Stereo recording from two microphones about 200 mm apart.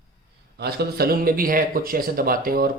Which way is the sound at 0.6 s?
50° right (ahead or behind).